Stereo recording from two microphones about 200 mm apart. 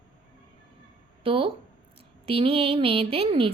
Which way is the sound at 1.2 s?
25° right (ahead or behind).